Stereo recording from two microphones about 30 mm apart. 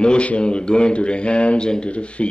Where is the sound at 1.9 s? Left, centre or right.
Left.